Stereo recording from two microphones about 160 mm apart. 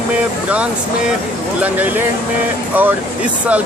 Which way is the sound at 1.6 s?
10° right (ahead or behind).